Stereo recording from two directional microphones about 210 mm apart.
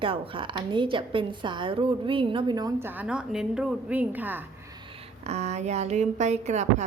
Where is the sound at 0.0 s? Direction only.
25° right (ahead or behind); by 4.4 s 10° right (ahead or behind).